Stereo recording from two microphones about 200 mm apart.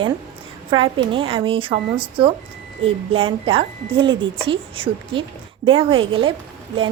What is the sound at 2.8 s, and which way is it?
Speech, 75° right (ahead or behind).